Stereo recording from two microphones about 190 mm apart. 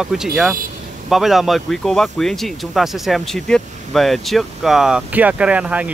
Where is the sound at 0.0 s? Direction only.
5° right (ahead or behind).